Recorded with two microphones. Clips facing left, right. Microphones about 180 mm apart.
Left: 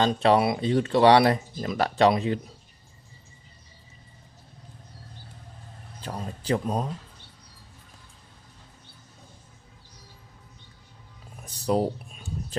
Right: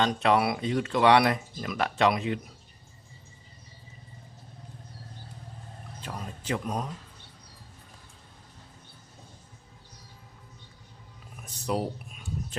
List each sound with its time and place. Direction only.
0.0 s speech: 30° left (ahead or behind)
6.0 s speech: 35° left (ahead or behind)
11.4 s a sound: 35° left (ahead or behind)